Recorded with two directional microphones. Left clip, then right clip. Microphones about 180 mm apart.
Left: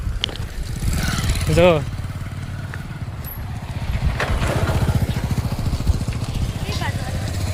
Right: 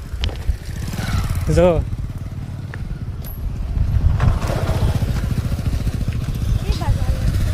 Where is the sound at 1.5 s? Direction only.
15° right (ahead or behind).